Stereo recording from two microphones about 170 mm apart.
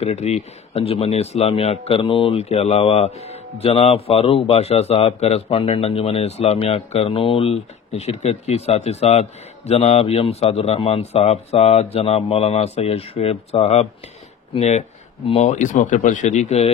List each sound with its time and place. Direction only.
0.0 s speech: 40° left (ahead or behind)